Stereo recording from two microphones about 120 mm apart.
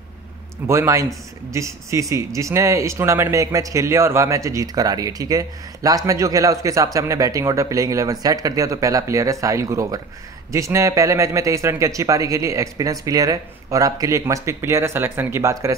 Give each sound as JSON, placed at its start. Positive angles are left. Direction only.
{"t": 0.7, "sound": "speech", "side_deg": -25}